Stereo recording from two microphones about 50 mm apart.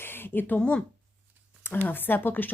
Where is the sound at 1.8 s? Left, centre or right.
Left.